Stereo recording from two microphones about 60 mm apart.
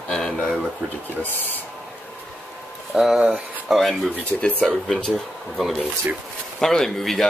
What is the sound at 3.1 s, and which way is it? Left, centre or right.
Speech, centre.